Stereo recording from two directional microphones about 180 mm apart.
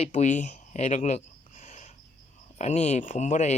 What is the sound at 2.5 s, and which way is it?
Speech, 40° left (ahead or behind).